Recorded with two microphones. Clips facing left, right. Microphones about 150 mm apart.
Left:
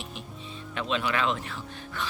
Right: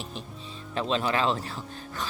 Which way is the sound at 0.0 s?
35° right (ahead or behind).